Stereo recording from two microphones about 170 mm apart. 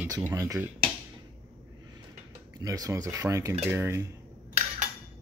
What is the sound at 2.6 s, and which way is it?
Speech, 20° right (ahead or behind).